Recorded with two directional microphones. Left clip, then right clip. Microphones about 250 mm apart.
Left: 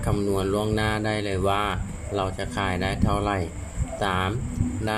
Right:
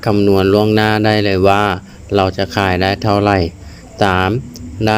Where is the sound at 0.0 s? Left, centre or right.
Right.